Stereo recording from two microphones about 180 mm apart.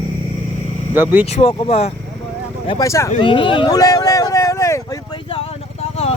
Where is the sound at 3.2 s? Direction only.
25° left (ahead or behind).